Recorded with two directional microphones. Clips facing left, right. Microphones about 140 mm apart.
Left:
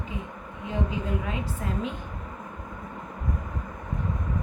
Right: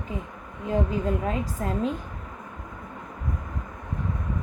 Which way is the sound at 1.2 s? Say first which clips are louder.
Right 4 dB; 45° right (ahead or behind).